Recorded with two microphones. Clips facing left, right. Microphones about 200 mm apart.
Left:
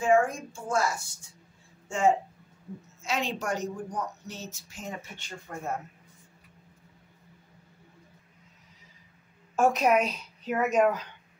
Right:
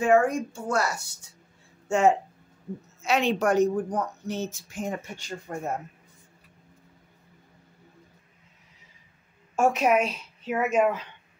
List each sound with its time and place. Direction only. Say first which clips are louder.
0.0 s a woman's voice: right 3 dB; 65° right (ahead or behind)
5.5 s speech: right 3 dB; 15° right (ahead or behind)
9.6 s a woman's voice: right 1 dB; 5° right (ahead or behind)